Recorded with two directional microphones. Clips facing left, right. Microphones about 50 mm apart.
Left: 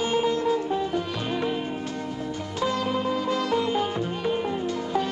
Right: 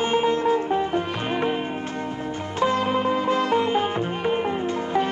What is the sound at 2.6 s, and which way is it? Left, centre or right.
Sitar, right.